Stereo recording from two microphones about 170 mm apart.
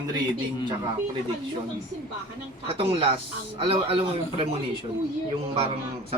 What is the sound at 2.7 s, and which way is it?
Speech, 30° right (ahead or behind).